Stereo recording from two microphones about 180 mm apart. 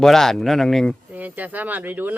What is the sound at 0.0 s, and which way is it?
Speech, centre (ahead or behind).